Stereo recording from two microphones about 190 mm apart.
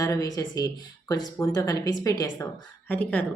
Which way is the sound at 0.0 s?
20° left (ahead or behind).